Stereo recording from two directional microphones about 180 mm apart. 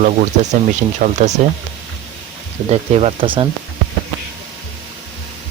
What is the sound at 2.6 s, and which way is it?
Speech, 35° right (ahead or behind).